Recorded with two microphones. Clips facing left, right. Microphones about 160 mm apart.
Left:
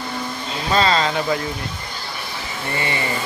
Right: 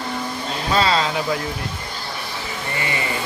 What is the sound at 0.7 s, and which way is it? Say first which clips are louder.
Speech: left 1 dB; 5° right (ahead or behind).